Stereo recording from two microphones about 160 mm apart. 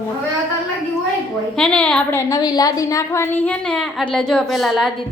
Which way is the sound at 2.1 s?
20° left (ahead or behind).